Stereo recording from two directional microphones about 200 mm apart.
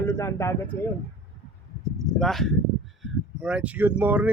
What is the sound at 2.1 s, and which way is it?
A man's voice, centre (ahead or behind).